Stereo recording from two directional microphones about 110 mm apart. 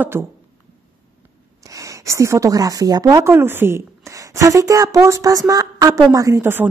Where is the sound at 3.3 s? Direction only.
20° right (ahead or behind).